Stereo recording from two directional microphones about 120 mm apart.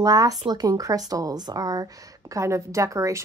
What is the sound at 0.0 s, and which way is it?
A woman's voice, 30° right (ahead or behind).